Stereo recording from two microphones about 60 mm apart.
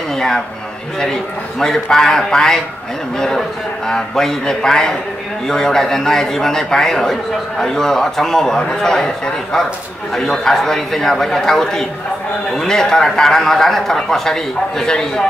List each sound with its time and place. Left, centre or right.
1.0 s a man's voice: centre